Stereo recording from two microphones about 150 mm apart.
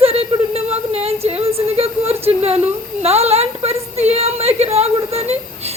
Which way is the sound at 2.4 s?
45° right (ahead or behind).